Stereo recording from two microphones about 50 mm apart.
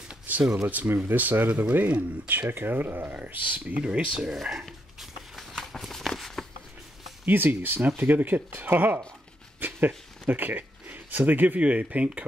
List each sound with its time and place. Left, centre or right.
0.3 s a sound: right
0.8 s speech: right
1.1 s speech: right
3.7 s speech: right
4.3 s speech: centre
5.3 s walk: centre
7.2 s speech: right
9.6 s a sound: right
10.2 s speech: right